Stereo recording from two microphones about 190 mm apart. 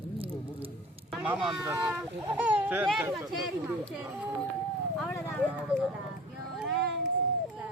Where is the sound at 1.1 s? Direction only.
Centre (ahead or behind).